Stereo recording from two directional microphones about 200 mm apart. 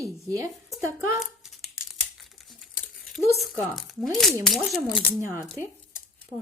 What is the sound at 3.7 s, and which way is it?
Speech, centre (ahead or behind).